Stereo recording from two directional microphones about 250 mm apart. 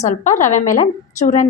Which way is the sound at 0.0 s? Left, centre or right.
Left.